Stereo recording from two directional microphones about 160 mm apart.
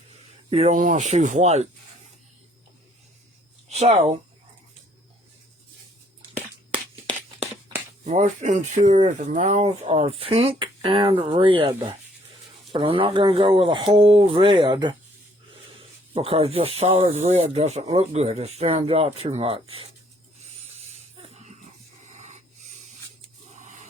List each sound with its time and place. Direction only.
0.5 s speech: 40° right (ahead or behind)
0.8 s speech: 55° right (ahead or behind)
3.7 s speech: 40° right (ahead or behind)
8.0 s speech: 45° right (ahead or behind); by 14.9 s 30° right (ahead or behind)
16.1 s speech: 35° right (ahead or behind)
20.7 s a sound: 40° right (ahead or behind)
23.6 s a sound: 50° right (ahead or behind)